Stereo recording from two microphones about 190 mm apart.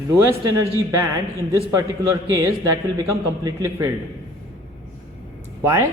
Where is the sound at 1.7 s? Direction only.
15° right (ahead or behind).